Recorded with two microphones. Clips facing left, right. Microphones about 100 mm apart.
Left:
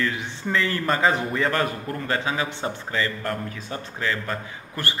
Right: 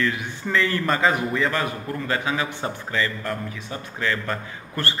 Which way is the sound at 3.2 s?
45° left (ahead or behind).